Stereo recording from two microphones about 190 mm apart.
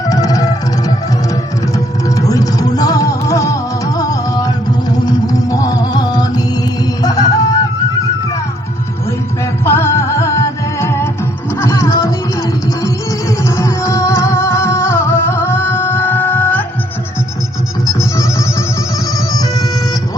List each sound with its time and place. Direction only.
0.0 s music: 20° left (ahead or behind)
7.0 s a sound: 20° left (ahead or behind)
9.0 s music: 15° left (ahead or behind)
17.8 s music: 15° left (ahead or behind)